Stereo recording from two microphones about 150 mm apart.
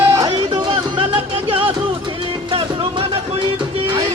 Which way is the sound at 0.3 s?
35° right (ahead or behind).